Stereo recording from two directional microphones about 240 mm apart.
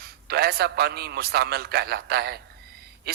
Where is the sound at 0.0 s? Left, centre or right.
Right.